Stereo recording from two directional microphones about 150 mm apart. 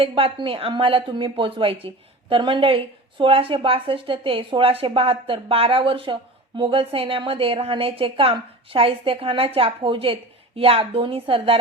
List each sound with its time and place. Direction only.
0.0 s a woman's voice: 35° right (ahead or behind)